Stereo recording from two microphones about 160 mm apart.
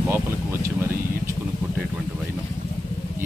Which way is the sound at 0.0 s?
15° right (ahead or behind).